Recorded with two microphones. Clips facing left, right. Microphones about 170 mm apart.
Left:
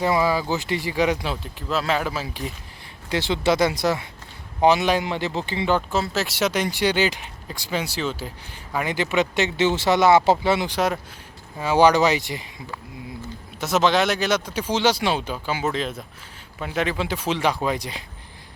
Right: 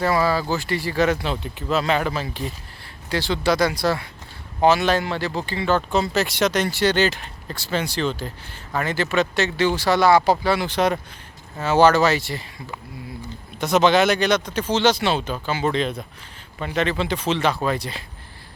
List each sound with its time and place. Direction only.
0.0 s speech: 15° left (ahead or behind)
1.7 s speech: centre (ahead or behind)
3.1 s speech: 20° left (ahead or behind)
5.9 s speech: centre (ahead or behind); by 10.7 s 20° left (ahead or behind)
10.7 s speech: 5° left (ahead or behind)
13.6 s speech: centre (ahead or behind)